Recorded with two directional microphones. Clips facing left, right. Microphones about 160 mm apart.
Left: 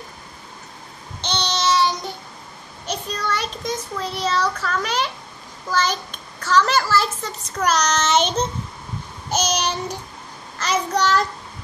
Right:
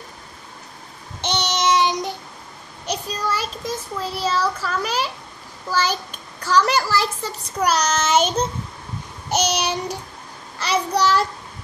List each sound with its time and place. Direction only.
1.2 s babbling: 20° right (ahead or behind)
2.9 s a child's voice: 10° right (ahead or behind)